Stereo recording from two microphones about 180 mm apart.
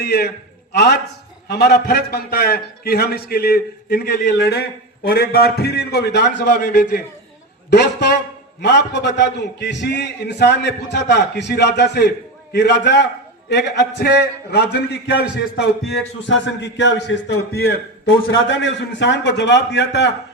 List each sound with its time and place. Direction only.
0.0 s a man's voice: 60° left (ahead or behind)
1.5 s a man's voice: 65° left (ahead or behind)
7.7 s a man's voice: 65° left (ahead or behind)
16.3 s a man's voice: 70° left (ahead or behind)